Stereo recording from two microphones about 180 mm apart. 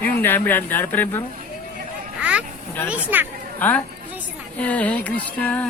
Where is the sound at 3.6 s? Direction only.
10° left (ahead or behind).